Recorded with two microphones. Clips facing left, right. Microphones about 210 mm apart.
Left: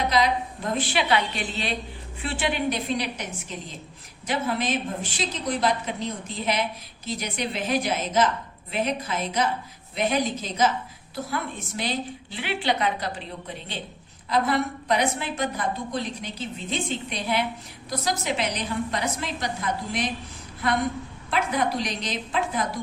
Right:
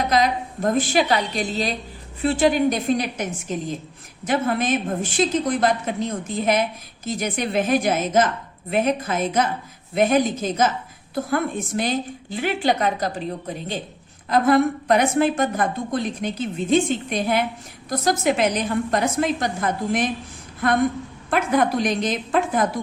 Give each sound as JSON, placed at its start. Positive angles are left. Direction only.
{"t": 0.1, "sound": "a woman's voice", "side_deg": -45}
{"t": 21.2, "sound": "a woman's voice", "side_deg": -50}